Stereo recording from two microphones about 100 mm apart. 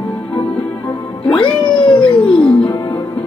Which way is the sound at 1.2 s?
60° left (ahead or behind).